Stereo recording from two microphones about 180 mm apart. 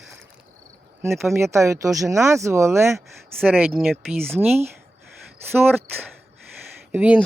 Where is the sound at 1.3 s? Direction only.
15° right (ahead or behind); by 4.0 s centre (ahead or behind).